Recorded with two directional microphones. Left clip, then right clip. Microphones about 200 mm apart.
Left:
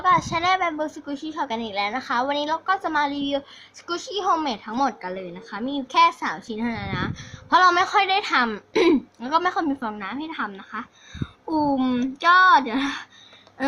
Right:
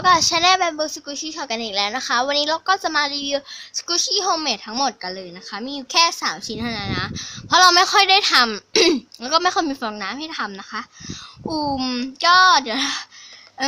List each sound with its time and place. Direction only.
0.0 s a woman's voice: 45° right (ahead or behind)